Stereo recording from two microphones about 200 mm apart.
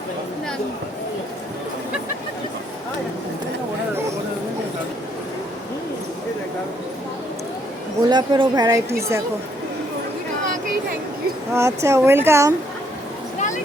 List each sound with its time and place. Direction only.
8.1 s a woman's voice: 20° right (ahead or behind)
11.5 s a woman's voice: 15° right (ahead or behind)